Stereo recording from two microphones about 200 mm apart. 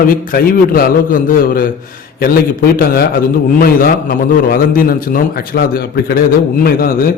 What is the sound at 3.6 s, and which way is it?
A man's voice, 45° left (ahead or behind).